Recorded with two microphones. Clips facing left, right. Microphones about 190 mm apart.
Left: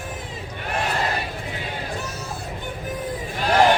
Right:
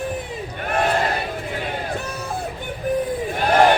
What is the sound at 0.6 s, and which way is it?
Crowd, 50° right (ahead or behind).